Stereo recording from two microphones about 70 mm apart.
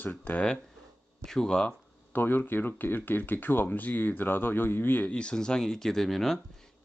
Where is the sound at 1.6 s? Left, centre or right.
Left.